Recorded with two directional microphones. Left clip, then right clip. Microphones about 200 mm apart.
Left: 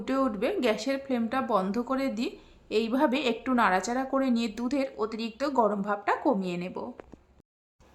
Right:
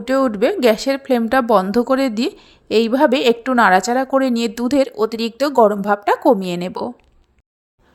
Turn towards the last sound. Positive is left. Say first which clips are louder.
# right 11 dB
turn(degrees=-35)  # may be behind; listen again after turning